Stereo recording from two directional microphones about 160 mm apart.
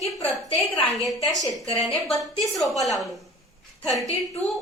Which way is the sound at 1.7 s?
Centre (ahead or behind).